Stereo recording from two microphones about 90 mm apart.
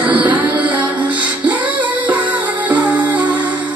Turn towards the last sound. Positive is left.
turn(degrees=-15)  # may be behind; listen again after turning